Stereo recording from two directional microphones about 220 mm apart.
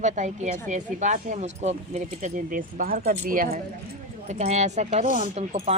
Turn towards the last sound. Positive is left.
turn(degrees=-30)  # may be behind; listen again after turning